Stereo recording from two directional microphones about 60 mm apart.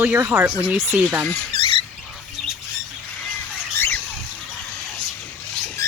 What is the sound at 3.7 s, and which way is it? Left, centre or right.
Bird, left.